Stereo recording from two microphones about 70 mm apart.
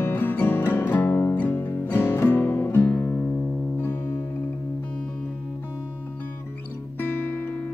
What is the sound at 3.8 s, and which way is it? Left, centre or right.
Music, left.